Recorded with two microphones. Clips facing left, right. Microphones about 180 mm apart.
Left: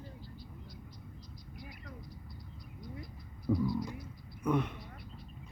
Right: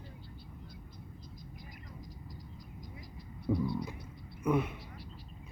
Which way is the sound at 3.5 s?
10° right (ahead or behind).